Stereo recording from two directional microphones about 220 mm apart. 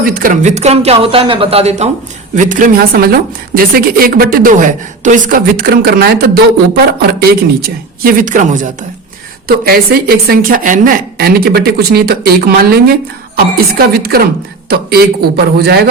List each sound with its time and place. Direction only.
0.0 s a woman's voice: 40° right (ahead or behind)